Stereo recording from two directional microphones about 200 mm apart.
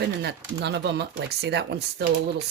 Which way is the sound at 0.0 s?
55° right (ahead or behind).